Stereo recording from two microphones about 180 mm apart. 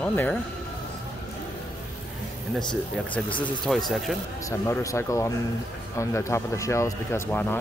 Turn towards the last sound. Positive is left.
turn(degrees=10)  # may be behind; listen again after turning